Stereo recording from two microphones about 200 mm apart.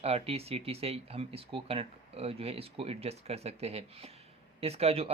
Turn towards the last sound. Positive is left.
turn(degrees=-30)  # may be behind; listen again after turning